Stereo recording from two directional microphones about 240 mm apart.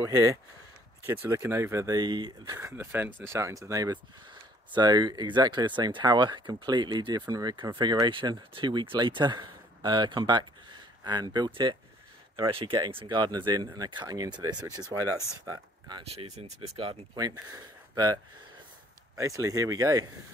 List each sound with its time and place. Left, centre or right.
0.0 s speech: centre